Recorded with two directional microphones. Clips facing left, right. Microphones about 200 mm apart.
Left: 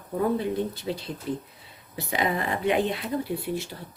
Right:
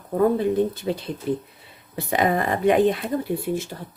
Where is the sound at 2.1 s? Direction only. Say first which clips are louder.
Right 6 dB; 50° right (ahead or behind).